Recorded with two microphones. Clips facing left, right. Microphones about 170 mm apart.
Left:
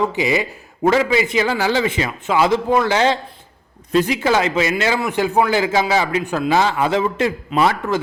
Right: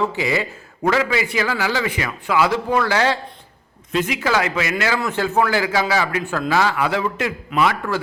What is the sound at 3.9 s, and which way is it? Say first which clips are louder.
A man's voice: left 4 dB; 35° left (ahead or behind).